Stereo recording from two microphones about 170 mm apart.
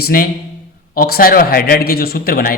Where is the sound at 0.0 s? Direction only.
60° left (ahead or behind).